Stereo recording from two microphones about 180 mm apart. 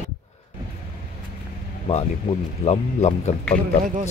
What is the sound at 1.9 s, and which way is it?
Speech, 35° left (ahead or behind).